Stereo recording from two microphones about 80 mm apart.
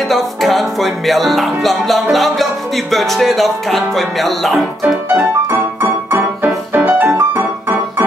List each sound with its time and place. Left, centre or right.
0.1 s music: centre
4.8 s music: right